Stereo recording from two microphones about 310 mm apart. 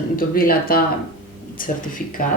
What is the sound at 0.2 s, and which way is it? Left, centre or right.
Speech, left.